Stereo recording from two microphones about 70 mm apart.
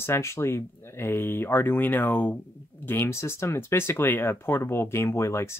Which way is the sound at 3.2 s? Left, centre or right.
Left.